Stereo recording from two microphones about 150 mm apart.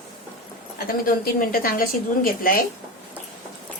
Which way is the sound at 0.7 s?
70° left (ahead or behind).